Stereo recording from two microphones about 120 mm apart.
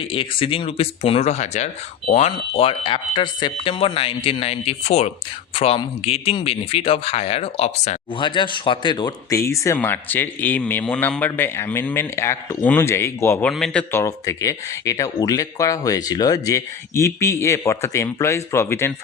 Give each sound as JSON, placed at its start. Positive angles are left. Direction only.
{"t": 0.0, "sound": "speech", "side_deg": 50}
{"t": 2.1, "sound": "speech", "side_deg": 60}
{"t": 8.2, "sound": "speech", "side_deg": 40}
{"t": 9.7, "sound": "a man's voice", "side_deg": 15}
{"t": 13.5, "sound": "a man's voice", "side_deg": 5}
{"t": 13.9, "sound": "speech", "side_deg": 25}